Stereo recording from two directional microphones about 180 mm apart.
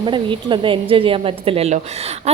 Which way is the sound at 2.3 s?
35° right (ahead or behind).